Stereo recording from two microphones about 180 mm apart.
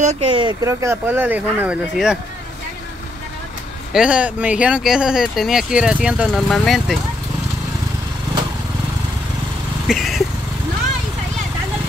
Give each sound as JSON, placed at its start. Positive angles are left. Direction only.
{"t": 0.0, "sound": "speech", "side_deg": -40}
{"t": 0.4, "sound": "speech", "side_deg": -20}
{"t": 3.9, "sound": "speech", "side_deg": -5}
{"t": 9.8, "sound": "vehicle", "side_deg": 0}